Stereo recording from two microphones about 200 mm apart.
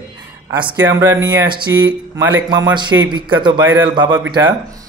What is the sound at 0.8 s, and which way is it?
Mantra, 15° right (ahead or behind).